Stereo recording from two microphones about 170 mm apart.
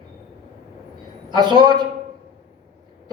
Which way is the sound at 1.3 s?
25° right (ahead or behind).